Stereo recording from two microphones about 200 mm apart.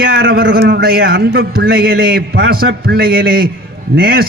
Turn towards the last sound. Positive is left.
turn(degrees=-50)  # may be behind; listen again after turning